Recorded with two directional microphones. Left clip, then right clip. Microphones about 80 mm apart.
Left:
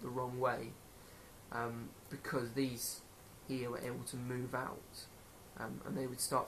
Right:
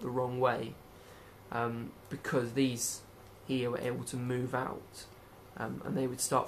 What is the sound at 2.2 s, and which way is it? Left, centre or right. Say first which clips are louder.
Speech: right 7 dB; right.